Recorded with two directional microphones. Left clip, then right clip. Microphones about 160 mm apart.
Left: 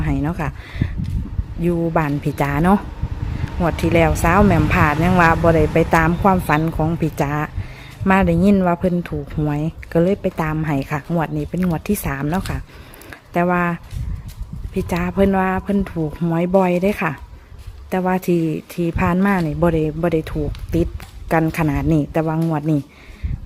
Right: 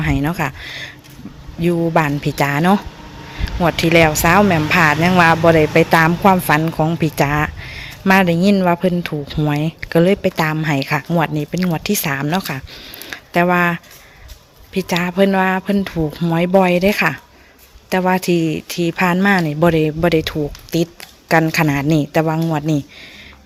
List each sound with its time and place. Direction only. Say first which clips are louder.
0.0 s a woman's voice: right 4 dB; 5° right (ahead or behind)